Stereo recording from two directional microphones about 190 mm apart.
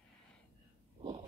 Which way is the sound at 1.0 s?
30° right (ahead or behind).